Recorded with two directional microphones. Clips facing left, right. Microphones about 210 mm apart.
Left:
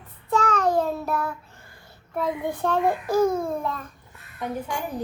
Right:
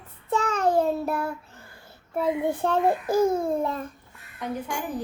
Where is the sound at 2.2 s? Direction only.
25° right (ahead or behind).